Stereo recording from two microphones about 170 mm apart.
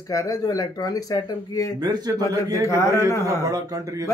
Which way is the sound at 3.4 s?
20° right (ahead or behind).